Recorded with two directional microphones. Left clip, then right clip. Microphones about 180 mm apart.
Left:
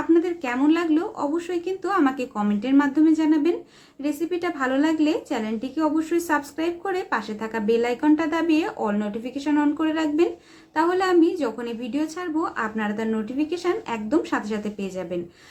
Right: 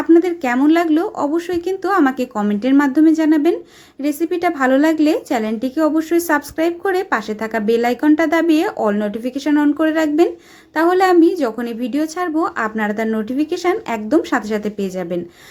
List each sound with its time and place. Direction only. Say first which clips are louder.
0.1 s a woman's voice: right 8 dB; 35° right (ahead or behind)